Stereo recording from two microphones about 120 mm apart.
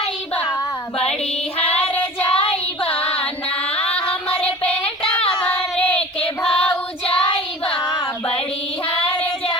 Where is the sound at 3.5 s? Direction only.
55° left (ahead or behind).